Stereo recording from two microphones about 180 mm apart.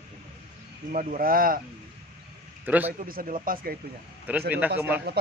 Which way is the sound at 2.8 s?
50° right (ahead or behind).